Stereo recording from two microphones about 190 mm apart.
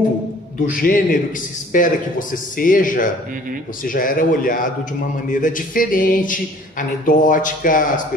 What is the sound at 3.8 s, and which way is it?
A man's voice, 45° left (ahead or behind).